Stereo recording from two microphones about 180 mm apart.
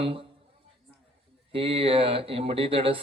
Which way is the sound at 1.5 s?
30° right (ahead or behind).